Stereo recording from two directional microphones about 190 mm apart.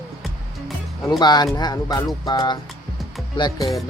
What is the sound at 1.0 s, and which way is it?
Speech, 20° left (ahead or behind).